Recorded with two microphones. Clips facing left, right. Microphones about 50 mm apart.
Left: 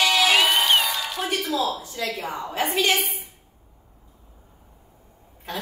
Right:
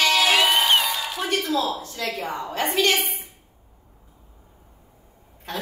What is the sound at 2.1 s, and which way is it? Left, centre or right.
A woman's voice, centre.